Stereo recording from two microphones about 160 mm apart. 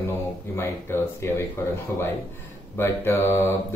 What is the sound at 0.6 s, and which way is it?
Speech, 15° left (ahead or behind).